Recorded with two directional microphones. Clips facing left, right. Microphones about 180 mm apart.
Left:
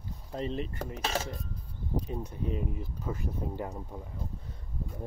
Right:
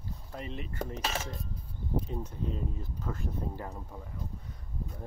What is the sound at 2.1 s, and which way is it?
Speech, 15° left (ahead or behind).